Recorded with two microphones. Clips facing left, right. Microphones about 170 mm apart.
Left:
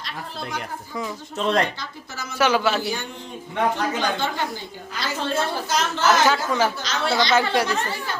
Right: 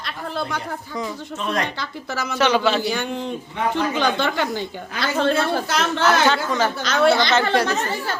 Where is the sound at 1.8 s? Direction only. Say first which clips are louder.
Right 7 dB; 70° right (ahead or behind).